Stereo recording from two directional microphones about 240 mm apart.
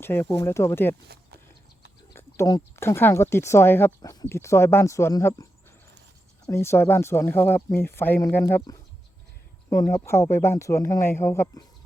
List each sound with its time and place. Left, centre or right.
0.0 s speech: centre
1.0 s a sound: right
2.1 s speech: centre